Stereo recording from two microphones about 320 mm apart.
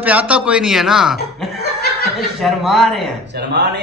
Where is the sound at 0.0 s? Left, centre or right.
Centre.